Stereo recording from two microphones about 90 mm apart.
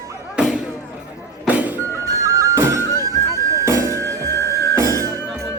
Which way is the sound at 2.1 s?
35° right (ahead or behind).